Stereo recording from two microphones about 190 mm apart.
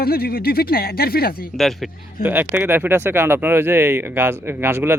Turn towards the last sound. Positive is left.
turn(degrees=-10)  # may be behind; listen again after turning